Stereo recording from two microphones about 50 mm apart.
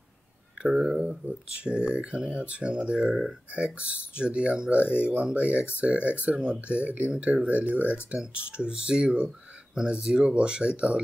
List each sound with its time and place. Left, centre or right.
0.6 s speech: centre
1.2 s speech: right